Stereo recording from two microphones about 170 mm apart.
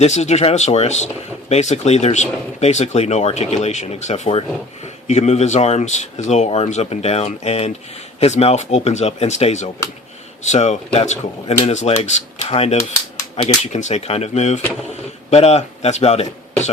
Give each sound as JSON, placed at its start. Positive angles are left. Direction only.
{"t": 0.0, "sound": "speech", "side_deg": 40}